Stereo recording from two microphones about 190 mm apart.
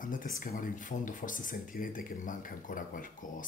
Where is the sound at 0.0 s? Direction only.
45° left (ahead or behind).